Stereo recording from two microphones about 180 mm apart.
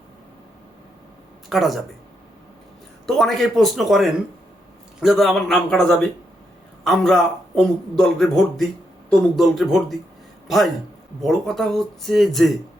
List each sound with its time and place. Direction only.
1.5 s speech: centre (ahead or behind)
3.2 s speech: centre (ahead or behind)
11.2 s speech: centre (ahead or behind)